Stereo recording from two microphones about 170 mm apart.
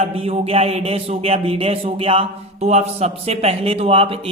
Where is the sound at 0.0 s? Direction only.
35° right (ahead or behind).